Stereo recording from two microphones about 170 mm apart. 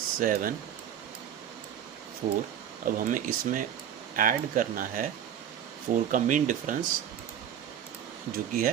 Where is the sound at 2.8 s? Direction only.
50° right (ahead or behind).